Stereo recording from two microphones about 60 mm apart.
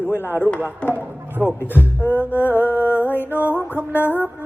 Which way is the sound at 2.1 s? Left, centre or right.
Left.